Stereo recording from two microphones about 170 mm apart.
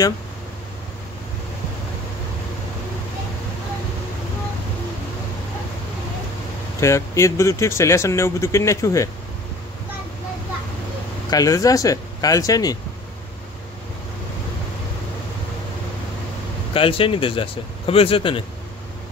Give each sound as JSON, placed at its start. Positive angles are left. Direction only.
{"t": 6.8, "sound": "speech", "side_deg": 15}
{"t": 11.2, "sound": "speech", "side_deg": 20}
{"t": 16.7, "sound": "speech", "side_deg": 30}